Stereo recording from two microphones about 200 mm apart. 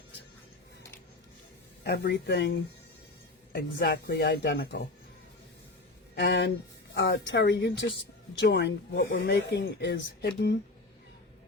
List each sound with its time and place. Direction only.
1.8 s speech: 55° left (ahead or behind)
6.1 s speech: 55° left (ahead or behind)